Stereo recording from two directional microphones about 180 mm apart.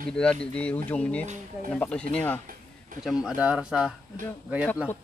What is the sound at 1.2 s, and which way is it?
Speech, 40° right (ahead or behind).